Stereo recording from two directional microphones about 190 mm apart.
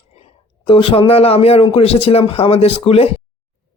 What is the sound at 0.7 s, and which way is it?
Speech, 25° left (ahead or behind).